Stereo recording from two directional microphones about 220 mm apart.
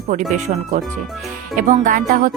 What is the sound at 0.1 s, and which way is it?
Speech, 30° right (ahead or behind).